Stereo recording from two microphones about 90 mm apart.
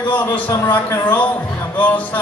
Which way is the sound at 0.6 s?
25° left (ahead or behind).